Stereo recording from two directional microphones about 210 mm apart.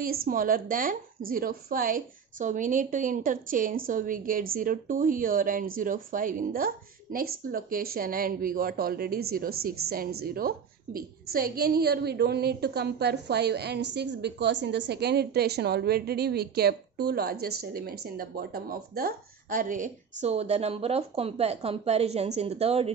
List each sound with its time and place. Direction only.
0.0 s a woman's voice: 45° right (ahead or behind); by 22.8 s 30° right (ahead or behind)